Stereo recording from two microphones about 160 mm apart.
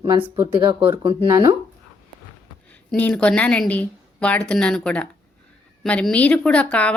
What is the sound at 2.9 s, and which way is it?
A woman's voice, 5° left (ahead or behind).